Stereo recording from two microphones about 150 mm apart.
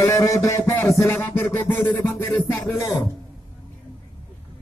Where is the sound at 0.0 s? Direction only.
20° left (ahead or behind).